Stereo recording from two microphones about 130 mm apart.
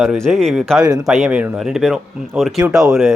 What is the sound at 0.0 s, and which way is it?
Speech, 5° right (ahead or behind).